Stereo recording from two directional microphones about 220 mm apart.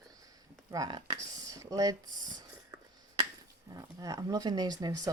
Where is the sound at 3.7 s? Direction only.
15° right (ahead or behind).